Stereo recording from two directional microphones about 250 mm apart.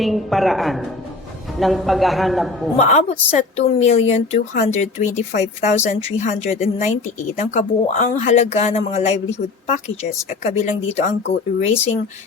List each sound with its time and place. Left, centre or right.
0.0 s a man's voice: centre
2.7 s speech: left